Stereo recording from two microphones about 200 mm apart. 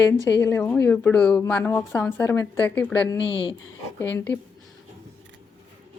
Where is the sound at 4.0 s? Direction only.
10° left (ahead or behind).